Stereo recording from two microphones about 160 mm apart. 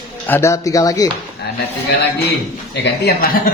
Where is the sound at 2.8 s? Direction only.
90° left.